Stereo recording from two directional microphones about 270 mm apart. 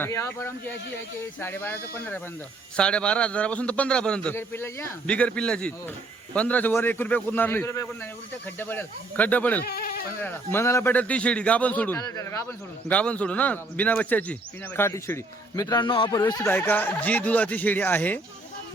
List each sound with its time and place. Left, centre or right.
0.0 s a man's voice: centre
9.6 s speech: left
10.2 s a man's voice: centre